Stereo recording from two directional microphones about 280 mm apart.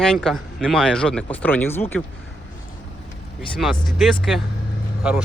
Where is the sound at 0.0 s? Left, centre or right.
Centre.